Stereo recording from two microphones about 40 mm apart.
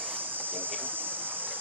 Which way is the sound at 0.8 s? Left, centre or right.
Right.